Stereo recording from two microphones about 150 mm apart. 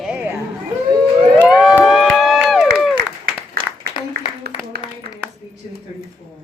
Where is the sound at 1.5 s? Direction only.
5° right (ahead or behind).